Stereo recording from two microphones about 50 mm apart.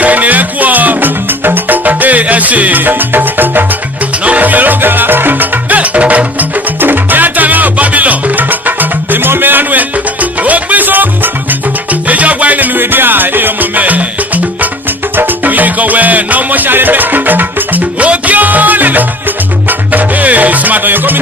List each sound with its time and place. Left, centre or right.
0.0 s music: right
4.2 s music: right
6.7 s music: right